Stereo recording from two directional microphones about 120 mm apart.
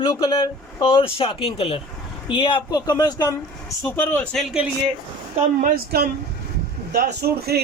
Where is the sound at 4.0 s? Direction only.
20° left (ahead or behind).